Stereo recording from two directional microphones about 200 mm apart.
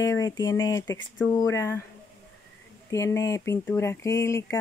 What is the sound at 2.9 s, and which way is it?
Speech, 15° left (ahead or behind).